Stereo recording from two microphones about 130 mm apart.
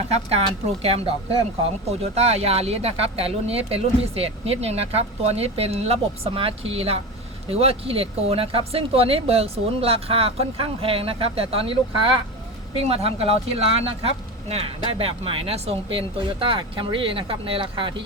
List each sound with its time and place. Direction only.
0.1 s speech: 50° right (ahead or behind)
2.1 s speech: 55° right (ahead or behind)